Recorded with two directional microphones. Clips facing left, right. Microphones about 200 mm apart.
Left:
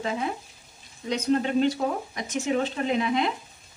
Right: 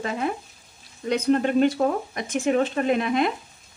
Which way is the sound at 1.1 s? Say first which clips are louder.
Right 3 dB; 55° right (ahead or behind).